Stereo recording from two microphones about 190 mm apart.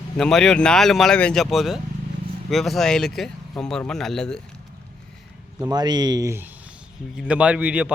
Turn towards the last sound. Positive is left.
turn(degrees=-5)  # may be behind; listen again after turning